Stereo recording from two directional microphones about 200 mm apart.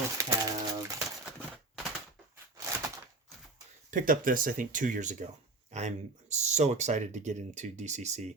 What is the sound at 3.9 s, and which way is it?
Speech, 45° right (ahead or behind).